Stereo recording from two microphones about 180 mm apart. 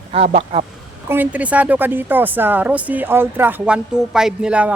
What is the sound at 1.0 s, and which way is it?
A woman's voice, 10° right (ahead or behind).